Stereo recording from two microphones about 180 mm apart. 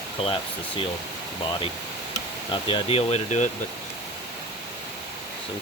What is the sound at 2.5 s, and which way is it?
Speech, 30° left (ahead or behind).